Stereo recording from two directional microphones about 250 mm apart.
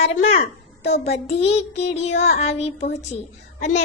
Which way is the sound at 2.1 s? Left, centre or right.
Left.